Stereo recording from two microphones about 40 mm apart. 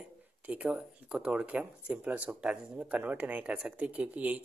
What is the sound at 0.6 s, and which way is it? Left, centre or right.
Speech, right.